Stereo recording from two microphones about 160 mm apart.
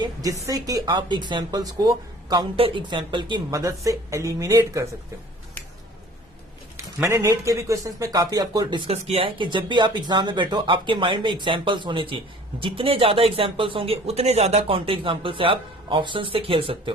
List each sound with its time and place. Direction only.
0.0 s speech: 20° right (ahead or behind)
6.7 s speech: 15° right (ahead or behind)
8.9 s speech: 40° right (ahead or behind)